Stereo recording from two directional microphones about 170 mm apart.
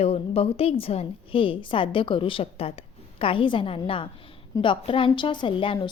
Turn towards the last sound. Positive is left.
turn(degrees=30)  # may be behind; listen again after turning